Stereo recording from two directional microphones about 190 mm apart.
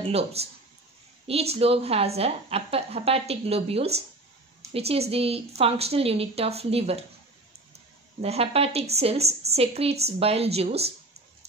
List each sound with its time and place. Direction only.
0.0 s a woman's voice: 30° right (ahead or behind)
8.2 s a woman's voice: 30° right (ahead or behind)